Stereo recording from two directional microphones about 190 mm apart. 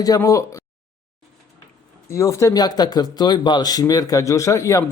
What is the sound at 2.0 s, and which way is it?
Speech, 15° left (ahead or behind).